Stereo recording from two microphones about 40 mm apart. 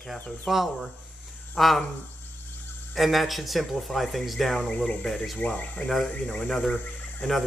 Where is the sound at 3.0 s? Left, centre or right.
Centre.